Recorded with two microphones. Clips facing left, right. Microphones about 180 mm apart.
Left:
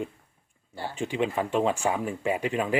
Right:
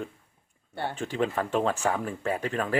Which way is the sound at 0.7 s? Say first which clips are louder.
Right 3 dB; 60° right (ahead or behind).